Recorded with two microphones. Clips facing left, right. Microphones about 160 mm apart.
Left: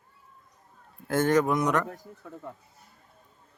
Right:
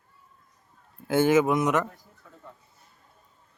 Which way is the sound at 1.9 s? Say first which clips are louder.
Left 9 dB; 50° left (ahead or behind).